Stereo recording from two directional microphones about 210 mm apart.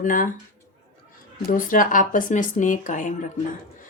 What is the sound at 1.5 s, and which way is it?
A woman's voice, 40° left (ahead or behind).